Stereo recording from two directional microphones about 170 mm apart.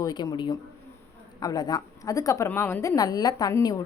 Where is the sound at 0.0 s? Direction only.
25° left (ahead or behind).